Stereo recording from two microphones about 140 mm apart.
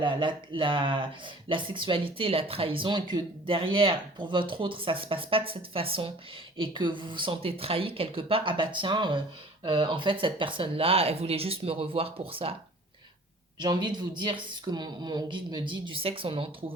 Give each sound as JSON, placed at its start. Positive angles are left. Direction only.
{"t": 0.0, "sound": "speech", "side_deg": -35}
{"t": 13.6, "sound": "speech", "side_deg": -30}